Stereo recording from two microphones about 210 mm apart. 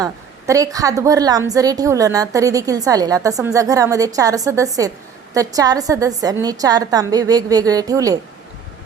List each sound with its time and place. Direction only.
0.0 s a woman's voice: 15° right (ahead or behind)